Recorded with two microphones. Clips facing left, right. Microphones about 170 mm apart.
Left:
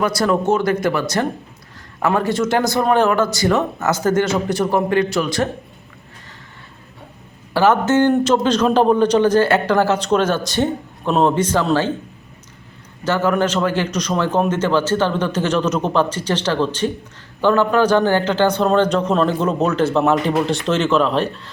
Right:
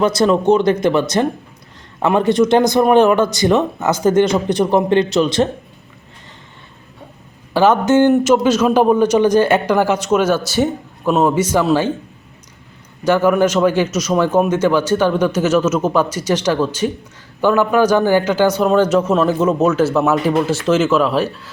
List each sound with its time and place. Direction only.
0.0 s speech: 20° right (ahead or behind)
7.5 s a man's voice: 15° right (ahead or behind)
13.1 s a man's voice: 10° right (ahead or behind)